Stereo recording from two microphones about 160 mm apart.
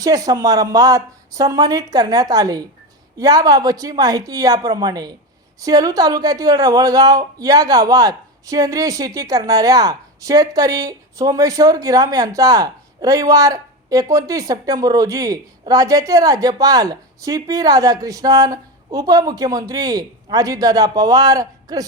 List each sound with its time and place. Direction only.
0.0 s a woman's voice: 20° right (ahead or behind)